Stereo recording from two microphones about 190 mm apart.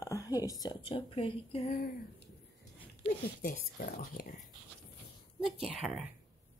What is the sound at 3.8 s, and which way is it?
Speech, 50° left (ahead or behind).